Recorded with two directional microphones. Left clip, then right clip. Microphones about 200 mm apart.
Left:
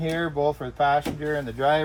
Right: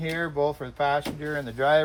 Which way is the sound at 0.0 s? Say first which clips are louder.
Left 2 dB; 20° right (ahead or behind).